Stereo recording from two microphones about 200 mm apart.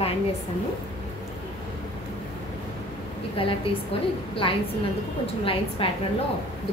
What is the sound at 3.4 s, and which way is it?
Speech, 30° left (ahead or behind).